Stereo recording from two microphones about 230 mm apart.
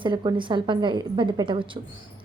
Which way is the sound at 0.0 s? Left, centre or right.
Right.